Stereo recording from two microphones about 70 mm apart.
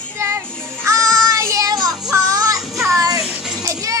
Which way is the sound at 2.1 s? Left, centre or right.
Right.